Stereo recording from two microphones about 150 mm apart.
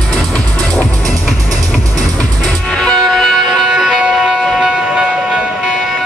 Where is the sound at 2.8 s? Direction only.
Centre (ahead or behind).